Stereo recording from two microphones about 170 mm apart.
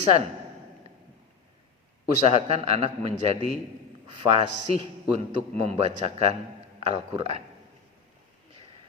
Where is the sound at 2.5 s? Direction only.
35° right (ahead or behind).